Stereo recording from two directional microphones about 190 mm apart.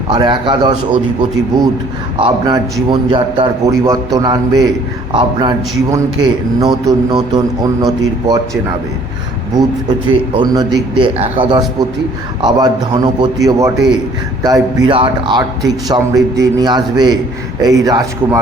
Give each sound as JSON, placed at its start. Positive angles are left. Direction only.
{"t": 0.1, "sound": "a man's voice", "side_deg": -25}
{"t": 10.1, "sound": "a man's voice", "side_deg": -25}